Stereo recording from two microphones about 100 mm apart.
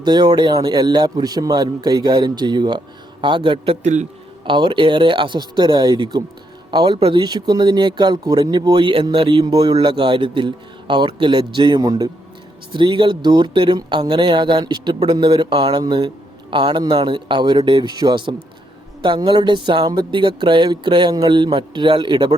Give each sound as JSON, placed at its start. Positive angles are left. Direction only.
{"t": 0.0, "sound": "a man's voice", "side_deg": -45}
{"t": 9.4, "sound": "a man's voice", "side_deg": -45}
{"t": 9.7, "sound": "a man's voice", "side_deg": -55}
{"t": 12.7, "sound": "a man's voice", "side_deg": -50}